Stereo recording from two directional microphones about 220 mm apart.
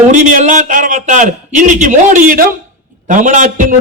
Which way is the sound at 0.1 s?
35° right (ahead or behind).